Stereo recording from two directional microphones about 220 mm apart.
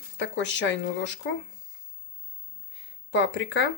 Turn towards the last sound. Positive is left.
turn(degrees=55)  # may be behind; listen again after turning